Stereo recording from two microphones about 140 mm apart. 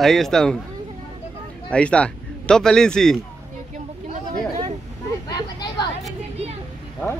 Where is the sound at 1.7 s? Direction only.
10° left (ahead or behind).